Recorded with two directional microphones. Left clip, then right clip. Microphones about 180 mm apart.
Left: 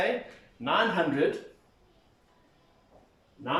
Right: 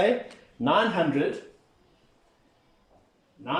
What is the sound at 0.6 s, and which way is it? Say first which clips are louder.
Speech: right 5 dB; 40° right (ahead or behind).